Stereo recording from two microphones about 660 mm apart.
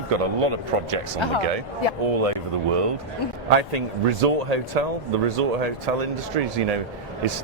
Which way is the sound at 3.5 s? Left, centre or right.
Right.